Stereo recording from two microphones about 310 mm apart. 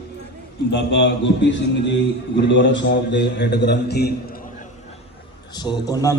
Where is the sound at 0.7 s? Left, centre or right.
Left.